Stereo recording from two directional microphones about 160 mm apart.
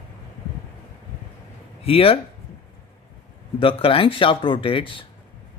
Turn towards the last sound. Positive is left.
turn(degrees=30)  # may be behind; listen again after turning